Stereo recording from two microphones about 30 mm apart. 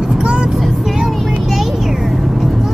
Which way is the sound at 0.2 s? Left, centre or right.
Right.